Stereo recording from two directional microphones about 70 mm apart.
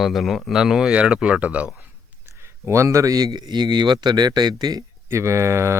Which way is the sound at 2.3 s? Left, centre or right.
Right.